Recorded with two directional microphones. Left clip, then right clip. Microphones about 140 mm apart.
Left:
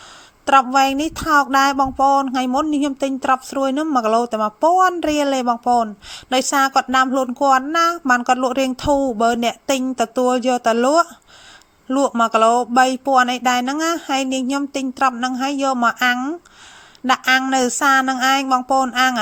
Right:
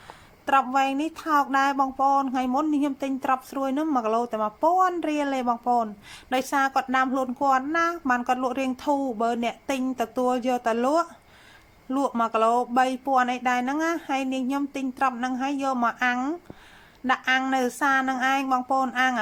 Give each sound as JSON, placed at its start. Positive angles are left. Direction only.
{"t": 0.4, "sound": "speech", "side_deg": 40}
{"t": 16.1, "sound": "speech", "side_deg": 25}
{"t": 17.1, "sound": "a sound", "side_deg": 45}